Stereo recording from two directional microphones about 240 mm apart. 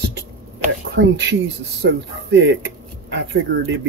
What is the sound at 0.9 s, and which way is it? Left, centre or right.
Speech, right.